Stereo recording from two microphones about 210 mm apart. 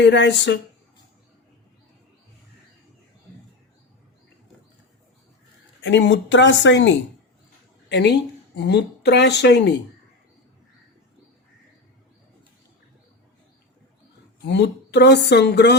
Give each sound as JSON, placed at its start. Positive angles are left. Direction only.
{"t": 0.0, "sound": "speech", "side_deg": 55}
{"t": 5.8, "sound": "a woman's voice", "side_deg": 60}
{"t": 14.4, "sound": "speech", "side_deg": 55}